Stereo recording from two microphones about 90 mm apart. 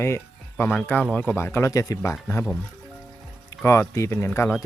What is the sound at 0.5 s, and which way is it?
Speech, 15° left (ahead or behind).